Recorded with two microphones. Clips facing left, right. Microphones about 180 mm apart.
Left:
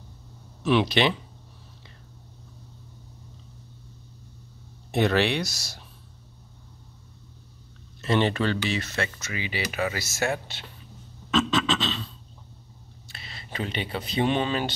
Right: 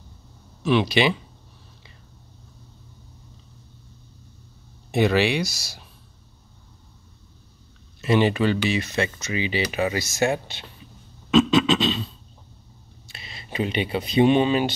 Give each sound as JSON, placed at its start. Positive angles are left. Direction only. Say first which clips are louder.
{"t": 0.6, "sound": "speech", "louder": "right 2 dB", "side_deg": 0}
{"t": 4.9, "sound": "speech", "louder": "right 3 dB", "side_deg": -5}
{"t": 8.0, "sound": "speech", "louder": "right 4 dB", "side_deg": -10}
{"t": 11.2, "sound": "a sound", "louder": "right 7 dB", "side_deg": -15}
{"t": 13.1, "sound": "speech", "louder": "right 5 dB", "side_deg": -15}